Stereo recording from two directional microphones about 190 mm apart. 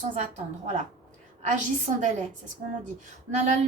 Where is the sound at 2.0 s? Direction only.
40° right (ahead or behind).